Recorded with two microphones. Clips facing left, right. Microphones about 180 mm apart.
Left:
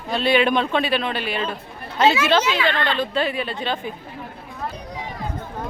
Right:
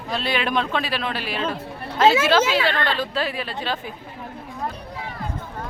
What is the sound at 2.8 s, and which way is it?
A woman's voice, 5° right (ahead or behind).